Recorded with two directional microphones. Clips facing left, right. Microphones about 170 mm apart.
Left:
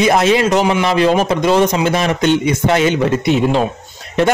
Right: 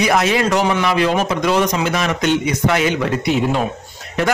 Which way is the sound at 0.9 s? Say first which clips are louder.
Left 4 dB; 30° left (ahead or behind).